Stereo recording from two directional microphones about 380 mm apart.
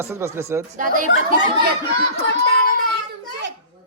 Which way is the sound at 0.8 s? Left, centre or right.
Centre.